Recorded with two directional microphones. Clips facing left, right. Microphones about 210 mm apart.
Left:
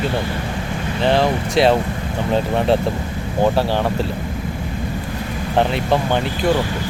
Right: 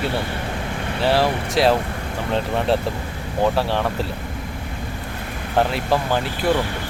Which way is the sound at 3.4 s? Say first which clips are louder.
Left 3 dB; centre (ahead or behind).